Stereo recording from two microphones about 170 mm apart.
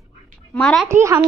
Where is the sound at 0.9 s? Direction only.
15° right (ahead or behind).